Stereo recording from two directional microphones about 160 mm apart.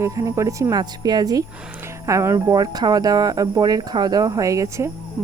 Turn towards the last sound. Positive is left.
turn(degrees=-20)  # may be behind; listen again after turning